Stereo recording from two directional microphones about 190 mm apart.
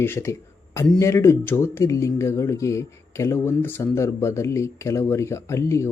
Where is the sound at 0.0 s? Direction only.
10° left (ahead or behind).